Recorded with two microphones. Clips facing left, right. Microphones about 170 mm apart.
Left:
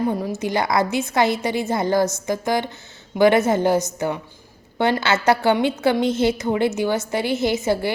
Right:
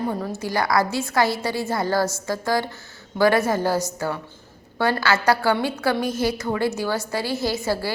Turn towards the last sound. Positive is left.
turn(degrees=20)  # may be behind; listen again after turning